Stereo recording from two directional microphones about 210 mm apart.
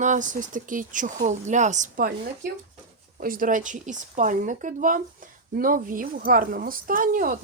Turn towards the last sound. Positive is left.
turn(degrees=-40)  # may be behind; listen again after turning